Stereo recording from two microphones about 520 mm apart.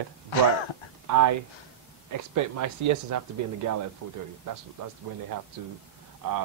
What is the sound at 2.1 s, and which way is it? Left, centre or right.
Speech, right.